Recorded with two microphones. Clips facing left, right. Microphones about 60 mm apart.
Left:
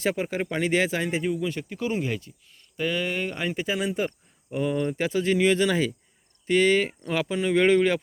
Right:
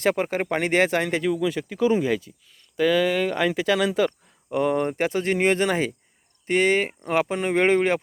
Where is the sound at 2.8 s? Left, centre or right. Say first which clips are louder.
Right 7 dB; right.